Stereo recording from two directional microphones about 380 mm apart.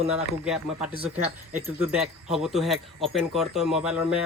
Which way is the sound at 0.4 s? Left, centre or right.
Centre.